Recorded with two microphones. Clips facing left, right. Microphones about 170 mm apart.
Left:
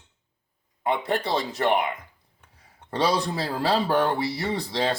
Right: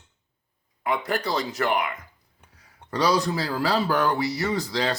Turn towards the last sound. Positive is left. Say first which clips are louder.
# even
turn(degrees=25)  # may be behind; listen again after turning